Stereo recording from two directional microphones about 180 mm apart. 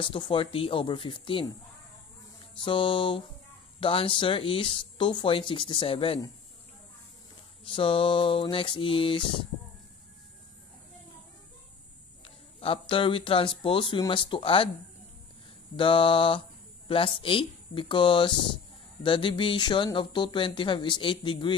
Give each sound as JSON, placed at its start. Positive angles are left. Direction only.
{"t": 0.0, "sound": "speech", "side_deg": 30}
{"t": 2.6, "sound": "speech", "side_deg": 25}
{"t": 7.6, "sound": "speech", "side_deg": 30}
{"t": 12.5, "sound": "speech", "side_deg": 30}
{"t": 15.7, "sound": "speech", "side_deg": 30}